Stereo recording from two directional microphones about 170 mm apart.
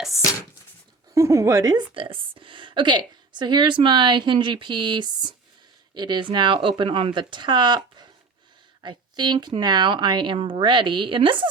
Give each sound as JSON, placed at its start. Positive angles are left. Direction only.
{"t": 1.1, "sound": "a woman's voice", "side_deg": -20}
{"t": 8.8, "sound": "a woman's voice", "side_deg": -25}